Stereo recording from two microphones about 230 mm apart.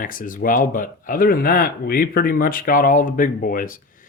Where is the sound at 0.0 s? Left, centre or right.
Left.